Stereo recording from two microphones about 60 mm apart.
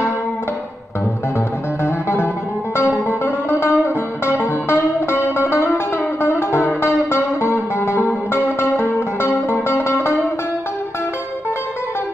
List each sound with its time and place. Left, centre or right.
1.9 s music: left